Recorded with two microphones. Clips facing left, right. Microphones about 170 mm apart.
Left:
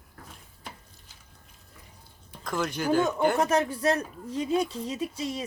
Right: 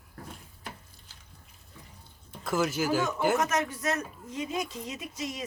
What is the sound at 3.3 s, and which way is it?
Speech, 30° left (ahead or behind).